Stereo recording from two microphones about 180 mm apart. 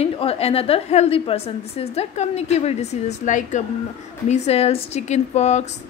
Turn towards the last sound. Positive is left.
turn(degrees=40)  # may be behind; listen again after turning